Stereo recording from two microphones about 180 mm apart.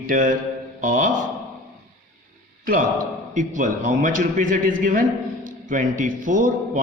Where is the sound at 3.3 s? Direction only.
45° right (ahead or behind).